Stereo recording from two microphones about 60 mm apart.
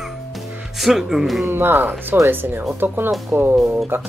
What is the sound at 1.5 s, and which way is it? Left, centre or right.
Speech, right.